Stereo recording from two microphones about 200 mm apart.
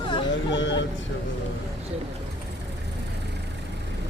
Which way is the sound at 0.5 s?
65° left (ahead or behind).